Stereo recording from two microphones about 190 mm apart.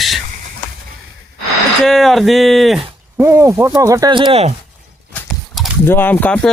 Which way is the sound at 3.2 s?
15° right (ahead or behind).